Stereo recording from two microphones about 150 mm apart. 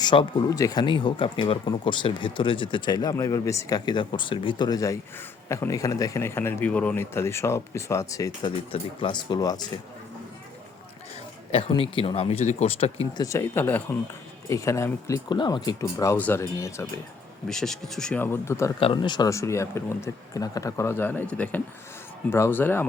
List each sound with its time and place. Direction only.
0.0 s a man's voice: 30° left (ahead or behind)
8.7 s a man's voice: 35° left (ahead or behind)
11.7 s speech: 35° left (ahead or behind)
13.1 s a man's voice: 20° left (ahead or behind)
16.1 s a man's voice: 15° left (ahead or behind)
17.5 s speech: 5° left (ahead or behind)
18.8 s a man's voice: 35° left (ahead or behind); by 22.9 s 15° left (ahead or behind)